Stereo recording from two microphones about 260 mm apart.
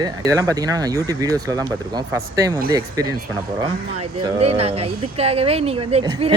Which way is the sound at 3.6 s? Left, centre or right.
Right.